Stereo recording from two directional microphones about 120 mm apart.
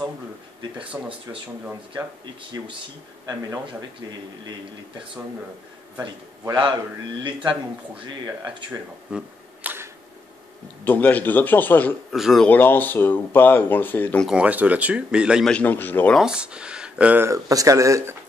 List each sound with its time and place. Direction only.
0.9 s speech: 25° right (ahead or behind)
7.2 s speech: 45° right (ahead or behind)
9.1 s camera: 15° right (ahead or behind)
10.8 s speech: 15° left (ahead or behind)
12.1 s speech: centre (ahead or behind)
12.4 s speech: 15° left (ahead or behind)
14.2 s speech: 10° right (ahead or behind)
15.4 s speech: 10° left (ahead or behind)
16.2 s speech: 5° right (ahead or behind)
17.3 s speech: 30° right (ahead or behind)